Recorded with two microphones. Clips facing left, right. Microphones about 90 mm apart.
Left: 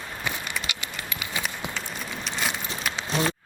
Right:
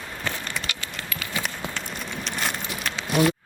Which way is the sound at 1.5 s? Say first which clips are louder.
Right 1 dB; 20° left (ahead or behind).